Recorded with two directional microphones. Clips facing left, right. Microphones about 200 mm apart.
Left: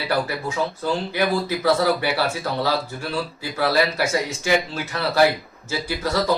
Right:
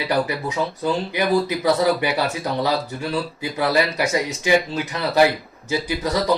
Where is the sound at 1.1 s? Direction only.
15° right (ahead or behind).